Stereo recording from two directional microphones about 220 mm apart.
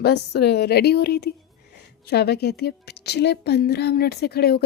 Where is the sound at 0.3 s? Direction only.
45° left (ahead or behind).